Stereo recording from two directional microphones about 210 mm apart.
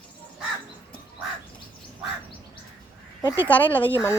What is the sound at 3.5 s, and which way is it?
Speech, 10° left (ahead or behind).